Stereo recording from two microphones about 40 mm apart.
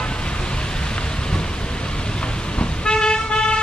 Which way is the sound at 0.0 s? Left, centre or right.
Left.